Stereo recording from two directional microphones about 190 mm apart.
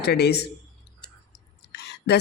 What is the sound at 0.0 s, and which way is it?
Speech, 60° left (ahead or behind).